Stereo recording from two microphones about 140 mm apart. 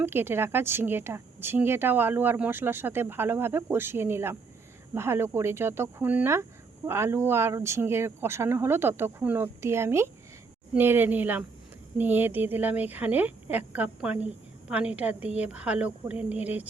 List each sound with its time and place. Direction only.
0.0 s speech: 15° right (ahead or behind)